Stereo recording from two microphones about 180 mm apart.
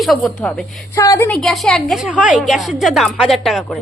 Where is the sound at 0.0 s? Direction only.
Centre (ahead or behind).